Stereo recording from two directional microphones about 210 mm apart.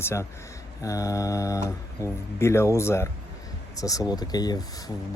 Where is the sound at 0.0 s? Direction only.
10° left (ahead or behind).